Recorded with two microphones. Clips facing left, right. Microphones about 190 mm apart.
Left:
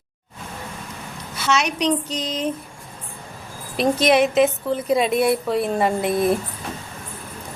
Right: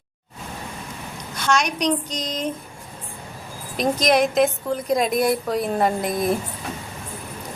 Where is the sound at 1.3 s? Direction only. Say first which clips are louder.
Even; 5° left (ahead or behind).